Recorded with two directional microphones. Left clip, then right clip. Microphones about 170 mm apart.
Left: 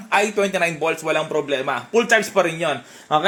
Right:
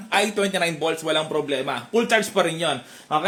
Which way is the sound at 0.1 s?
5° right (ahead or behind).